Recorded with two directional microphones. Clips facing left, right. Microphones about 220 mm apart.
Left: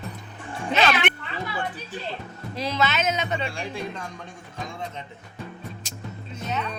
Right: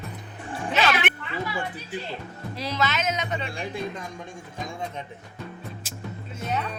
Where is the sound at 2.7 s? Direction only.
25° left (ahead or behind).